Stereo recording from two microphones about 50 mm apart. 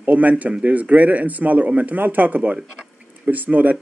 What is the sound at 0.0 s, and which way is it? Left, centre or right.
A man's voice, right.